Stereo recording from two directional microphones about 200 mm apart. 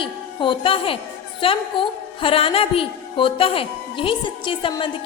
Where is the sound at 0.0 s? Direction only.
25° left (ahead or behind).